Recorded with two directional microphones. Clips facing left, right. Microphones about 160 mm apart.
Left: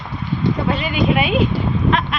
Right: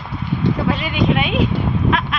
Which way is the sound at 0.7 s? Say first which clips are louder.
Even; centre (ahead or behind).